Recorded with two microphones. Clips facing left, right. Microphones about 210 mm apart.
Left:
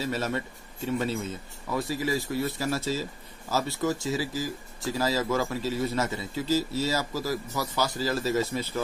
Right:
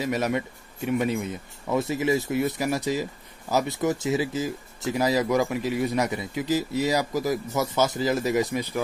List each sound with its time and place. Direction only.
0.0 s speech: 15° right (ahead or behind)